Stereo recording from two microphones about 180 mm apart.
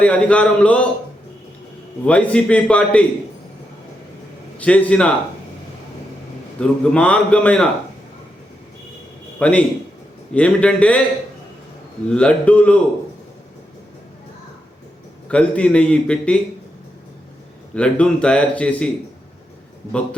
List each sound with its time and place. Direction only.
0.0 s a man's voice: 5° left (ahead or behind)
2.0 s a man's voice: 5° left (ahead or behind)
4.5 s a man's voice: 10° left (ahead or behind)
6.6 s a man's voice: 5° left (ahead or behind)
9.4 s a man's voice: 5° left (ahead or behind)
12.0 s a man's voice: 5° left (ahead or behind)
15.3 s a man's voice: 5° left (ahead or behind)
17.7 s a man's voice: 5° left (ahead or behind)